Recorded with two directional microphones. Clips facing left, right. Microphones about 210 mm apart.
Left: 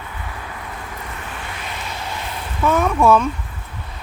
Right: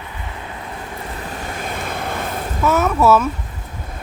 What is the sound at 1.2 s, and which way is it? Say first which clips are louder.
Vehicle: right 4 dB; 40° right (ahead or behind).